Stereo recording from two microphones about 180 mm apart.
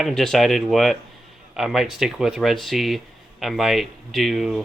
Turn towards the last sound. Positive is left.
turn(degrees=0)  # may be behind; listen again after turning